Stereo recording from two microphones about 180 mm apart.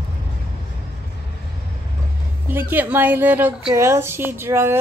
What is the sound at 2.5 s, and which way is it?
A woman's voice, 10° right (ahead or behind).